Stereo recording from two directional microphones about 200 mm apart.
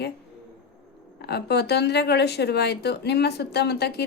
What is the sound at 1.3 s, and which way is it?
A woman's voice, 55° left (ahead or behind).